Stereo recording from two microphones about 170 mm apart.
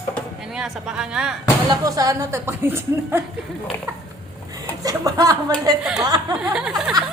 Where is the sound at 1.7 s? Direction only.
20° right (ahead or behind).